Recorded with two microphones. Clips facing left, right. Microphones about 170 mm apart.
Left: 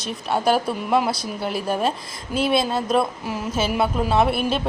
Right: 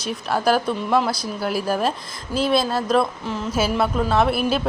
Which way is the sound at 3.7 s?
5° left (ahead or behind).